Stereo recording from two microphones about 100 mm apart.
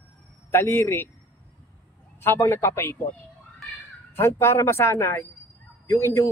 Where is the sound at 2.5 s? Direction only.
25° left (ahead or behind).